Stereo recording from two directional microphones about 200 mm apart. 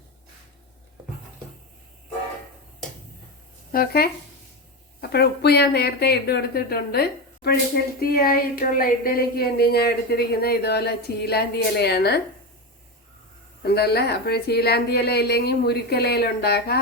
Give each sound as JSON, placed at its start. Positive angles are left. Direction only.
{"t": 3.7, "sound": "speech", "side_deg": 50}
{"t": 13.7, "sound": "speech", "side_deg": 55}